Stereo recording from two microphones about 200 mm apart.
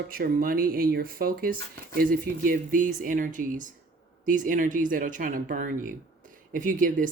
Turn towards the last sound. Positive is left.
turn(degrees=-40)  # may be behind; listen again after turning